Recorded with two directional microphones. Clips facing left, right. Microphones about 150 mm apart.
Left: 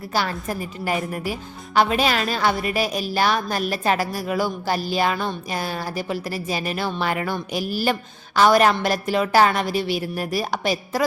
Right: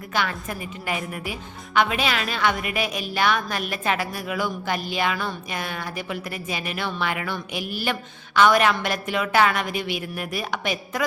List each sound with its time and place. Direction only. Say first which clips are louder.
0.1 s a woman's voice: left 2 dB; 35° left (ahead or behind)